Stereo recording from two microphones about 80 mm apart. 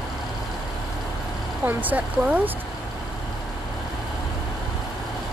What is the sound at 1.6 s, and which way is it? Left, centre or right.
Speech, centre.